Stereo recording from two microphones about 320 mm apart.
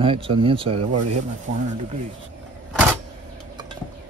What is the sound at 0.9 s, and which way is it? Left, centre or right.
Speech, right.